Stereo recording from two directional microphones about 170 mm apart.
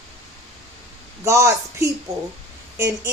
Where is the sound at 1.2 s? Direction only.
15° right (ahead or behind).